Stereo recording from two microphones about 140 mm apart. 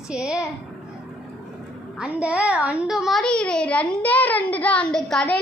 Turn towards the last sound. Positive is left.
turn(degrees=5)  # may be behind; listen again after turning